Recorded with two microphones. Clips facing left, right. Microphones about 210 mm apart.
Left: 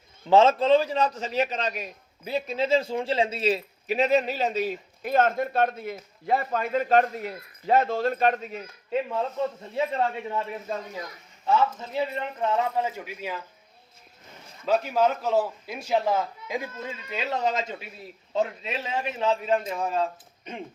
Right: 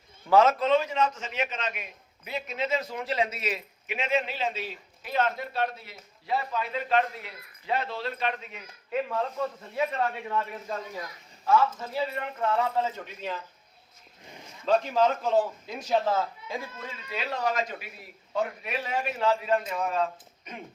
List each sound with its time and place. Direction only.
0.3 s a man's voice: 25° left (ahead or behind)
8.9 s a man's voice: 25° left (ahead or behind)
11.4 s a man's voice: 20° left (ahead or behind)
14.6 s a man's voice: 5° left (ahead or behind); by 20.6 s 30° left (ahead or behind)